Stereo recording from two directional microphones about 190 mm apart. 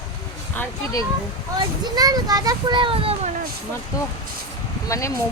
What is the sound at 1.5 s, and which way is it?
A child's voice, 20° right (ahead or behind).